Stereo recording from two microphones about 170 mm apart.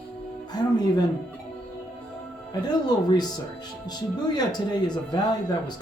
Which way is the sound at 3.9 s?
25° left (ahead or behind).